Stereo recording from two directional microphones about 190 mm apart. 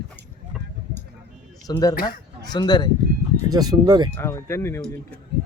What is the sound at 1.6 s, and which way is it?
Speech, 20° left (ahead or behind).